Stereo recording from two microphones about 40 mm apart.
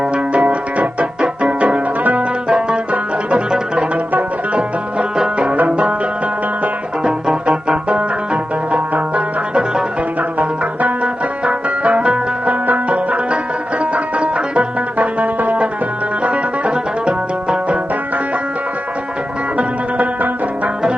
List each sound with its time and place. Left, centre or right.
0.0 s music: right
2.5 s music: right
2.9 s music: right
5.4 s music: right
7.0 s music: right
12.5 s music: right
16.2 s music: right